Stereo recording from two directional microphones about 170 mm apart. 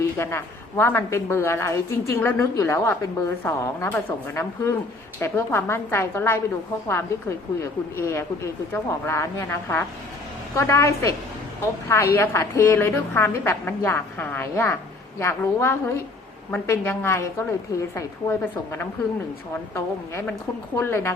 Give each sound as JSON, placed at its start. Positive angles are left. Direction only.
{"t": 0.2, "sound": "a woman's voice", "side_deg": 15}